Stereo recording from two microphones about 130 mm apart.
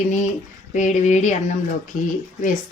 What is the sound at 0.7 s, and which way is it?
Speech, 70° left (ahead or behind).